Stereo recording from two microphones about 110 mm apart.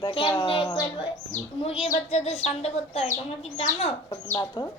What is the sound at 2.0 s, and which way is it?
Speech, 80° left.